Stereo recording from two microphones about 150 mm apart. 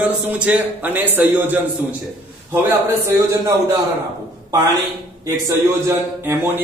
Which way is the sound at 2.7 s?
15° right (ahead or behind).